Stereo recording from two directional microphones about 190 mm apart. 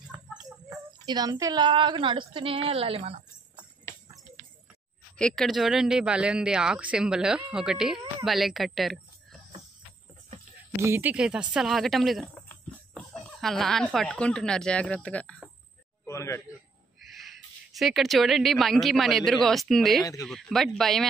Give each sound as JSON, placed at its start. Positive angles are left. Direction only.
{"t": 0.1, "sound": "jingle bell", "side_deg": -5}
{"t": 0.7, "sound": "a woman's voice", "side_deg": -20}
{"t": 5.1, "sound": "speech", "side_deg": 5}
{"t": 10.8, "sound": "a man's voice", "side_deg": -10}
{"t": 17.0, "sound": "owl", "side_deg": 0}
{"t": 17.7, "sound": "speech", "side_deg": 0}